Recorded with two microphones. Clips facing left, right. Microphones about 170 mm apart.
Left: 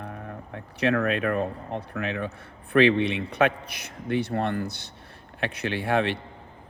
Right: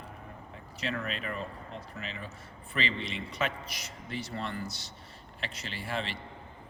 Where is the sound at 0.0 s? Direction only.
70° left (ahead or behind).